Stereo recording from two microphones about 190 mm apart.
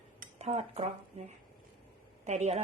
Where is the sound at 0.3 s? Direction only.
35° right (ahead or behind).